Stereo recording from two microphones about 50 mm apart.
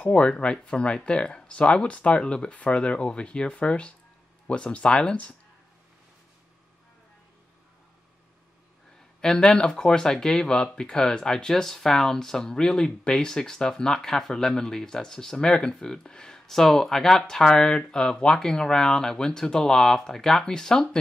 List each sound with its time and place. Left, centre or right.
0.0 s speech: left
9.2 s speech: centre